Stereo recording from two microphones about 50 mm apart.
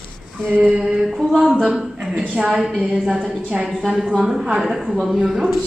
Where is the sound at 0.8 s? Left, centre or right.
Centre.